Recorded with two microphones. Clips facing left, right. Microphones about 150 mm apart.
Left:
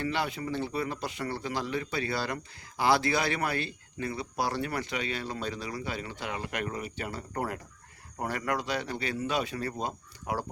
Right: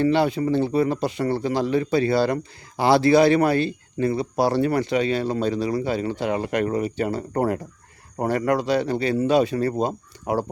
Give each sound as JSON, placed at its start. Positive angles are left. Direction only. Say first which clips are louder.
{"t": 0.0, "sound": "speech", "louder": "right 12 dB", "side_deg": -30}